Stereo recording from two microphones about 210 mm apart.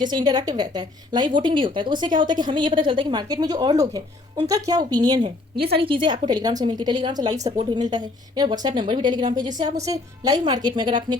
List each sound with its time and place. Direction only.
0.0 s speech: 20° right (ahead or behind)